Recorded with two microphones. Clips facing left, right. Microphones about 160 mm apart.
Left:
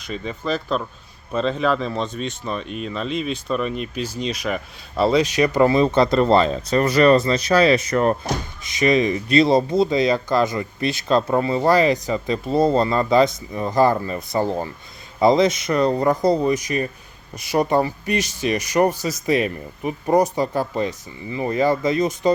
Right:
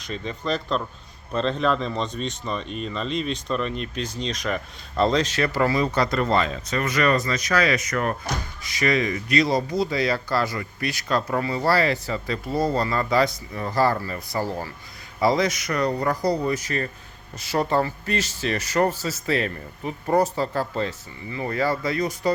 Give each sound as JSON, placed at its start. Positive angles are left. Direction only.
{"t": 0.0, "sound": "speech", "side_deg": 5}